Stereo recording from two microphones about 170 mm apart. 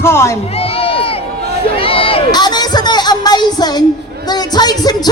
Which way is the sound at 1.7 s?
30° left (ahead or behind).